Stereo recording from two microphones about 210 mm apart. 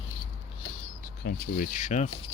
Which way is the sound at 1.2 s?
40° left (ahead or behind).